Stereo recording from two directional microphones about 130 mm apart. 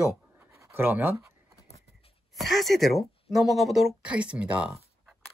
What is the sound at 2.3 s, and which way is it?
Speech, centre (ahead or behind).